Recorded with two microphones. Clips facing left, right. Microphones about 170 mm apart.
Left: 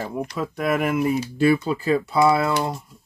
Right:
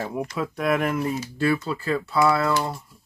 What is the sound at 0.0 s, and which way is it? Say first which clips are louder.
Speech: left 1 dB; centre (ahead or behind).